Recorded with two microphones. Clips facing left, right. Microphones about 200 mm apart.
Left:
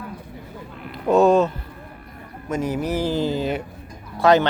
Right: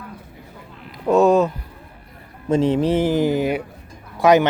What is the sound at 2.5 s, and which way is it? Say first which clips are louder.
Speech: right 6 dB; 30° right (ahead or behind).